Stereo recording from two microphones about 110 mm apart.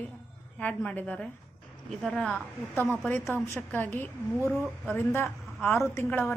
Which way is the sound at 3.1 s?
15° left (ahead or behind).